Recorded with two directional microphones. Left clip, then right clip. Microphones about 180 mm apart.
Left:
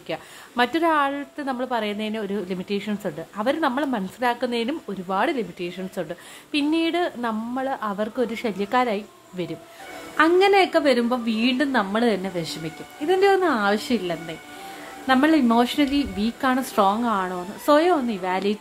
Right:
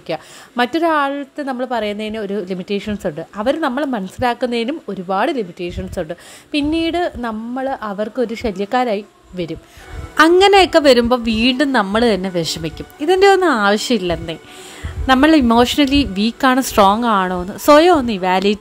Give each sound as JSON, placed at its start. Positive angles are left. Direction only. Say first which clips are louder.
{"t": 0.1, "sound": "a woman's voice", "louder": "right 6 dB", "side_deg": -25}
{"t": 10.1, "sound": "a woman's voice", "louder": "right 7 dB", "side_deg": -45}